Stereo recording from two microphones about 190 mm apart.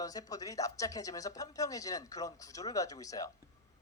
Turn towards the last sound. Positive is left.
turn(degrees=20)  # may be behind; listen again after turning